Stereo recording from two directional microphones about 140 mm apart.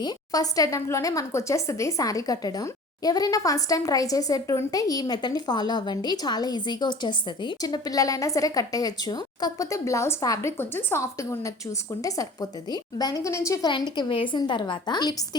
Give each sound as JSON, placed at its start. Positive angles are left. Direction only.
{"t": 0.0, "sound": "a woman's voice", "side_deg": 25}